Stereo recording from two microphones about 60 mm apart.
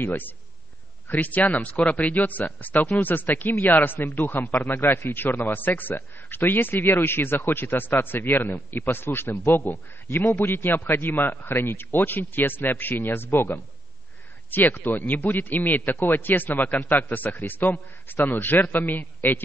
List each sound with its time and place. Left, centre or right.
0.0 s a man's voice: left